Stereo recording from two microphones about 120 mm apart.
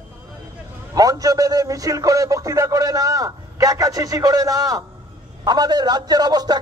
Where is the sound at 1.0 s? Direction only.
30° right (ahead or behind).